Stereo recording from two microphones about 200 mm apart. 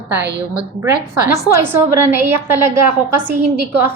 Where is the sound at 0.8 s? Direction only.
15° right (ahead or behind).